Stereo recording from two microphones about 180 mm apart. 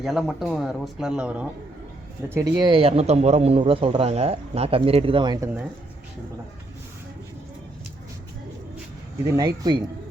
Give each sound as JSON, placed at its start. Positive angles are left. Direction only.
{"t": 0.0, "sound": "speech", "side_deg": 0}
{"t": 2.6, "sound": "a man's voice", "side_deg": -30}
{"t": 9.2, "sound": "speech", "side_deg": -20}